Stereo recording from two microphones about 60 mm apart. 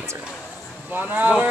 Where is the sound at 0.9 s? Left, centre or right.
Right.